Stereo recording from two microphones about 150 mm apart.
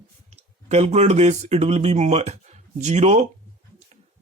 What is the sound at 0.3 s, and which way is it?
Speech, 45° right (ahead or behind).